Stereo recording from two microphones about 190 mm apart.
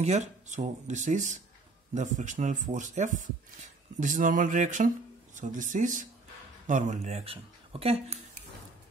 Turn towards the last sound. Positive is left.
turn(degrees=-30)  # may be behind; listen again after turning